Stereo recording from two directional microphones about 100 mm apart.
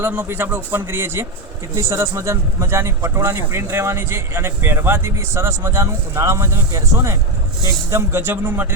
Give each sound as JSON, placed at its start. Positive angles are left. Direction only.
{"t": 0.0, "sound": "speech", "side_deg": -20}